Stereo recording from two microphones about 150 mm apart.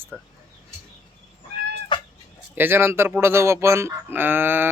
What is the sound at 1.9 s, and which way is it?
Cat, 35° left (ahead or behind).